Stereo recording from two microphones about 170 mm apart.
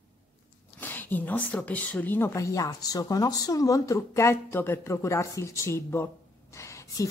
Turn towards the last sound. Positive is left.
turn(degrees=15)  # may be behind; listen again after turning